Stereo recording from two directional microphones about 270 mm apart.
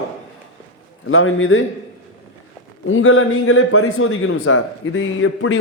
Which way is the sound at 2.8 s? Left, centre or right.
Left.